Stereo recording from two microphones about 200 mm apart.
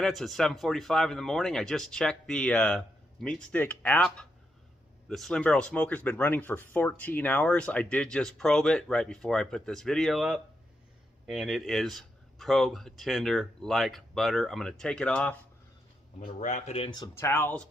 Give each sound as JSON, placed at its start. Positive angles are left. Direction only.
{"t": 0.0, "sound": "speech", "side_deg": 0}
{"t": 16.2, "sound": "speech", "side_deg": 40}